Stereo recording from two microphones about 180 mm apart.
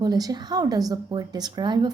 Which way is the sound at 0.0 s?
20° right (ahead or behind).